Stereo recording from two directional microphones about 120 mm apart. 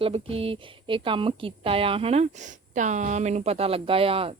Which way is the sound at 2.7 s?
90° right.